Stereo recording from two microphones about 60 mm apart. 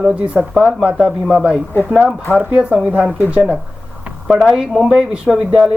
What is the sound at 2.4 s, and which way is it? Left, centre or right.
Speech, right.